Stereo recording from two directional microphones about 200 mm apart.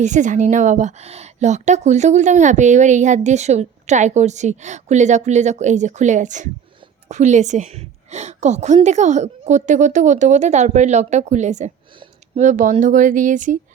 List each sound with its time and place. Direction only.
0.0 s a woman's voice: 35° right (ahead or behind)